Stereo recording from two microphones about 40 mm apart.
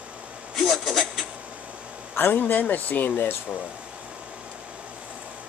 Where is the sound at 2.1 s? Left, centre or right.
Left.